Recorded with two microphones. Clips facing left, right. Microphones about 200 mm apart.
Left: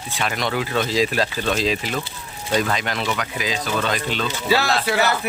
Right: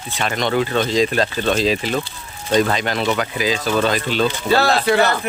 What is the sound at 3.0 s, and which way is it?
Speech, 35° right (ahead or behind).